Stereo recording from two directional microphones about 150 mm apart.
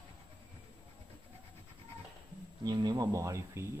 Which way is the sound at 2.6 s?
30° right (ahead or behind).